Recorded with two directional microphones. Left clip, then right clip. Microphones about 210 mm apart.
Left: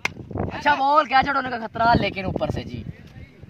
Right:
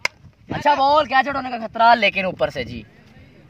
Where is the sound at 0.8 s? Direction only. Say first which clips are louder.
Right 1 dB; 35° right (ahead or behind).